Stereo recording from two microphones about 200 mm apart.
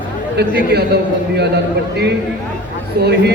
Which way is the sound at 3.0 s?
55° right (ahead or behind).